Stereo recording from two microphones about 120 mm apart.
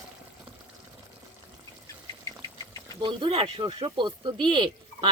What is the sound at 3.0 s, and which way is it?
Speech, 45° right (ahead or behind).